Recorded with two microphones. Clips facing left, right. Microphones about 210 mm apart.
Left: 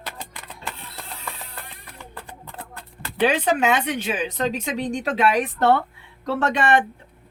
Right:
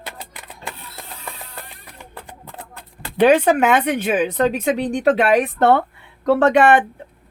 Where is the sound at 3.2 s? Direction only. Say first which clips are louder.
Right 6 dB; 55° right (ahead or behind).